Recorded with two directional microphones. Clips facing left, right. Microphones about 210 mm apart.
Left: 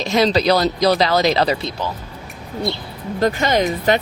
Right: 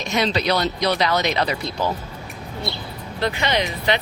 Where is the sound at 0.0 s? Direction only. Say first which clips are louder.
Left 6 dB; 35° left (ahead or behind).